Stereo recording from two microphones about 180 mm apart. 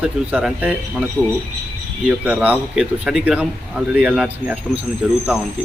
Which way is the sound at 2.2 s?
10° right (ahead or behind).